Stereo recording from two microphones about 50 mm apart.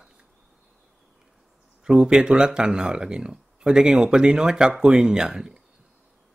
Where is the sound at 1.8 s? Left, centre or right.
Centre.